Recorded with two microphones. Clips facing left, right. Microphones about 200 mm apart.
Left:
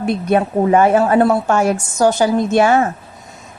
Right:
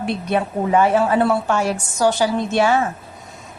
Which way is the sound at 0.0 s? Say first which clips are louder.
Left 5 dB; 50° left (ahead or behind).